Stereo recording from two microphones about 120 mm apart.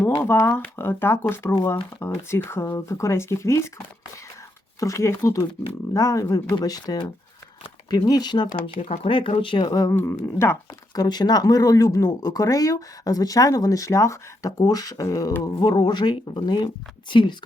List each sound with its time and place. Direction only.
0.2 s speech: 20° left (ahead or behind)
4.8 s speech: 25° left (ahead or behind)
8.8 s speech: 50° left (ahead or behind); by 9.9 s 35° left (ahead or behind)
9.9 s speech: 20° left (ahead or behind)
11.0 s speech: 35° left (ahead or behind)